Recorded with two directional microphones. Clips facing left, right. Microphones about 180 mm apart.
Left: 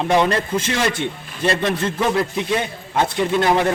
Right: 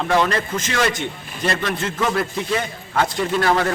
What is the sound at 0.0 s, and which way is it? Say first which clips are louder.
A man's voice: left 2 dB; 25° left (ahead or behind).